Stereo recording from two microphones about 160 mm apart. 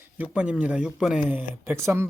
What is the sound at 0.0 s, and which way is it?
Speech, 10° right (ahead or behind).